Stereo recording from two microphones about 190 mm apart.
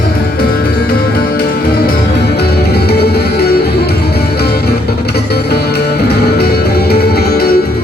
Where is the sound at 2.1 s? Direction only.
55° left (ahead or behind).